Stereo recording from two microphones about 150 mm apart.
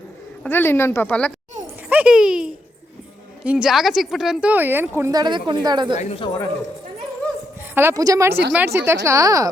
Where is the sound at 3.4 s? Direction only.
5° right (ahead or behind); by 6.0 s 30° right (ahead or behind).